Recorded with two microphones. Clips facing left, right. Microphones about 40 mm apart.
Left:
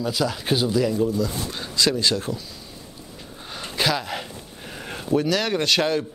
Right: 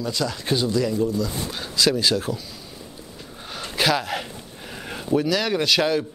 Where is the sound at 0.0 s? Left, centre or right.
Centre.